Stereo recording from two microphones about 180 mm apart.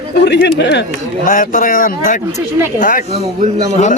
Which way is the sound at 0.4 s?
70° left (ahead or behind).